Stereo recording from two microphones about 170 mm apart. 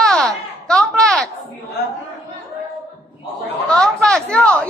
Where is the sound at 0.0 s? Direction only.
5° left (ahead or behind).